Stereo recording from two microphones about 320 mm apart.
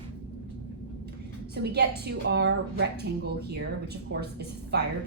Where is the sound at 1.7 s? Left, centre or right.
Right.